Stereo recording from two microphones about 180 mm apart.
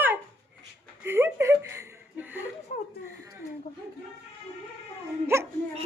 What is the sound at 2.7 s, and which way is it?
Chuckle, 45° left (ahead or behind).